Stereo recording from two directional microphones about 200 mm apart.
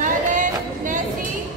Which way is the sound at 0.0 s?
40° right (ahead or behind).